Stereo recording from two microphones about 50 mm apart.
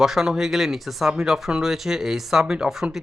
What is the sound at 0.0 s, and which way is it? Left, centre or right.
Speech, centre.